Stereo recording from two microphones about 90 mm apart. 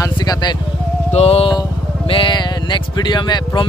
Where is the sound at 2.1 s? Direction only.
85° left.